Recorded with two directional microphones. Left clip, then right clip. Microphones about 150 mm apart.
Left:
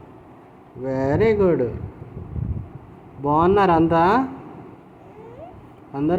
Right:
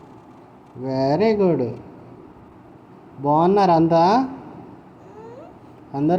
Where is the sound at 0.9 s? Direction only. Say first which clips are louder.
Even; 30° right (ahead or behind).